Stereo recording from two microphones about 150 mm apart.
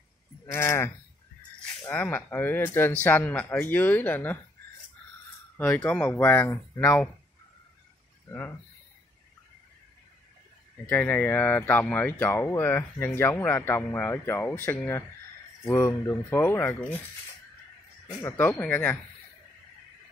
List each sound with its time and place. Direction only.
0.5 s speech: 20° left (ahead or behind)
5.6 s speech: 10° left (ahead or behind)
10.9 s speech: 10° left (ahead or behind)
18.0 s speech: 15° left (ahead or behind)